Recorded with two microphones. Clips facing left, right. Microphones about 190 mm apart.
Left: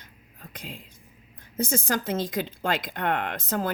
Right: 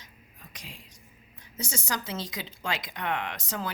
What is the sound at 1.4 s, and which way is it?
Speech, 55° left (ahead or behind).